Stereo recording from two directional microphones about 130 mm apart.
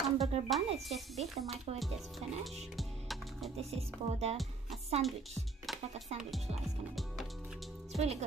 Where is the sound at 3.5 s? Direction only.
55° right (ahead or behind).